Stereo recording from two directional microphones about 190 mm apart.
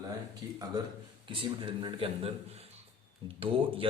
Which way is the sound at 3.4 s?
30° right (ahead or behind).